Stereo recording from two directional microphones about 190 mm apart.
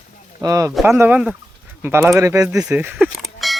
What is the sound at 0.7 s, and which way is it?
Speech, 5° right (ahead or behind).